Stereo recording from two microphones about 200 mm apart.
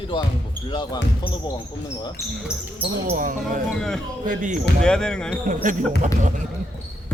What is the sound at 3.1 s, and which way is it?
Speech, 45° right (ahead or behind).